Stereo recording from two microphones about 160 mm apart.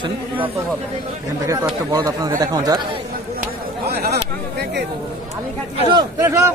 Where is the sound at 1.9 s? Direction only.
25° right (ahead or behind).